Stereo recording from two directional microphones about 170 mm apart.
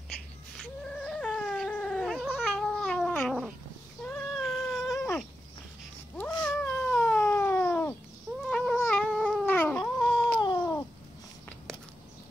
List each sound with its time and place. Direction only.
0.6 s a sound: 5° left (ahead or behind)
1.5 s cat: 5° left (ahead or behind)
4.9 s cat: 15° left (ahead or behind)